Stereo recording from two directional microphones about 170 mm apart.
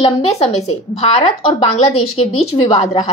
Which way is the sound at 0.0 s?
35° left (ahead or behind).